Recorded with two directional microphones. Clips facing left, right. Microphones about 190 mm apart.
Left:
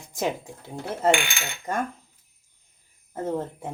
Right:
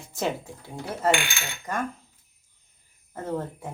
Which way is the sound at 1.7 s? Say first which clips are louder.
Left 2 dB; 30° left (ahead or behind).